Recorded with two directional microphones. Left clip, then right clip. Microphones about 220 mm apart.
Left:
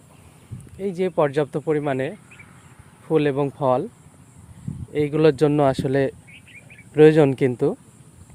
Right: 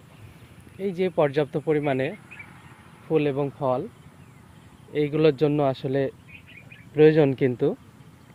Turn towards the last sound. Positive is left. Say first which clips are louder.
# left 3 dB
turn(degrees=10)  # may be behind; listen again after turning